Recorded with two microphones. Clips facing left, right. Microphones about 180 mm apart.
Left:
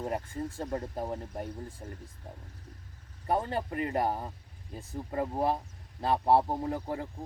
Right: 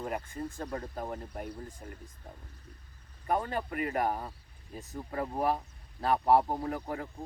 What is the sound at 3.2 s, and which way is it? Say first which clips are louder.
Speech: left 1 dB; 30° left (ahead or behind).